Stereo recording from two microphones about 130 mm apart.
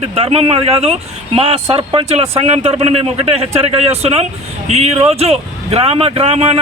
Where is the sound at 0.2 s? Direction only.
50° right (ahead or behind).